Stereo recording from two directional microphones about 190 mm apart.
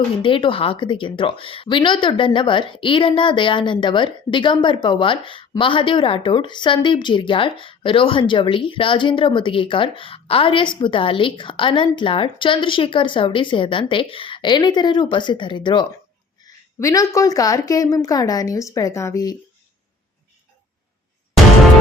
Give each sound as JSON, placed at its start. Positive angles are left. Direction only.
{"t": 0.2, "sound": "a woman's voice", "side_deg": 25}